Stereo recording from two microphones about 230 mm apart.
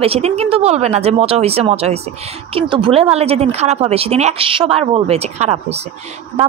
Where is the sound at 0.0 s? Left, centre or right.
Right.